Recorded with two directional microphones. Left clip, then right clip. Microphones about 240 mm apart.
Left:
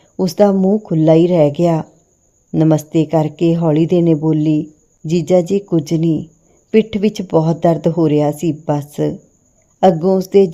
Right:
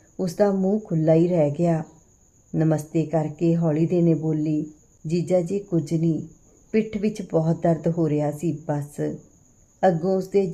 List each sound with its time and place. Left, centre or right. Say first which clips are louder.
0.2 s speech: left 9 dB; left